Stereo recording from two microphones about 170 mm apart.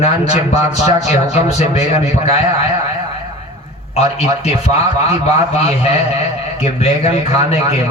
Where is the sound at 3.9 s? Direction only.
40° left (ahead or behind).